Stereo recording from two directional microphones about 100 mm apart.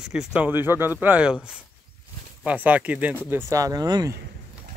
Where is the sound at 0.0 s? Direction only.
5° right (ahead or behind).